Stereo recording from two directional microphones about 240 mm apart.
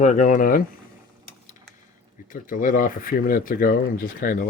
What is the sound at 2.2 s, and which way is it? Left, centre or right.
Speech, left.